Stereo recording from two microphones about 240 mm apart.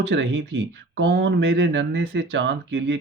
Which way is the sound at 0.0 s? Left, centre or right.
Right.